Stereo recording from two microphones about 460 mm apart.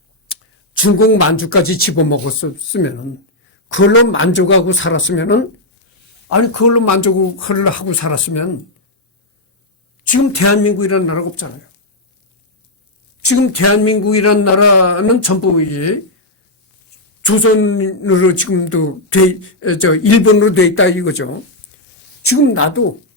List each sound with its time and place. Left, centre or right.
0.8 s a woman's voice: left
6.2 s speech: left
10.1 s speech: left
13.2 s speech: left
17.2 s a woman's voice: left